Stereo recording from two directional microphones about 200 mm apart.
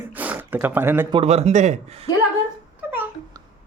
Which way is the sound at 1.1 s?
30° right (ahead or behind).